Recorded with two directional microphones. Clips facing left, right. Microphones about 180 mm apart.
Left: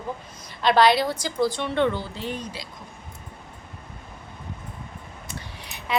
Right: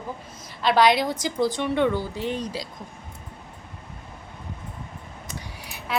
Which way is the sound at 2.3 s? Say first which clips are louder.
Right 4 dB; 35° right (ahead or behind).